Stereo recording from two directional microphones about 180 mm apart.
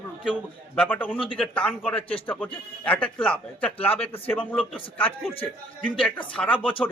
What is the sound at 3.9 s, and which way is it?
Speech, 30° left (ahead or behind).